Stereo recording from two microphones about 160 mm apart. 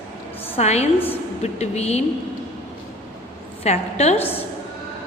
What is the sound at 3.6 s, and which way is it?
Speech, 45° left (ahead or behind).